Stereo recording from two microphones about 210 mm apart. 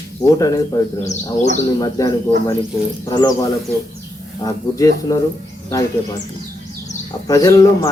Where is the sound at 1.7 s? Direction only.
15° left (ahead or behind).